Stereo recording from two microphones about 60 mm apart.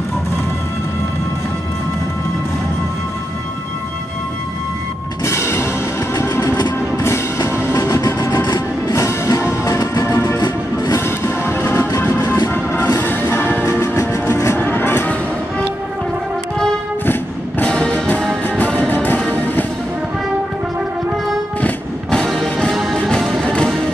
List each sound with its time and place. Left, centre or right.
5.2 s music: left
6.1 s train: left
7.0 s music: left
7.7 s train: left
9.0 s music: left
10.1 s music: left
13.7 s music: left
17.0 s music: left
17.6 s music: centre
18.9 s music: left
21.5 s music: left
22.2 s music: centre